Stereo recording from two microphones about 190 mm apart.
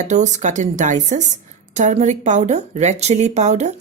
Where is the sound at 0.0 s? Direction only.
40° right (ahead or behind).